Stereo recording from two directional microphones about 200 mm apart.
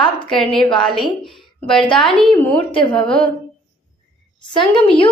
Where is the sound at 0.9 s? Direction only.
Centre (ahead or behind).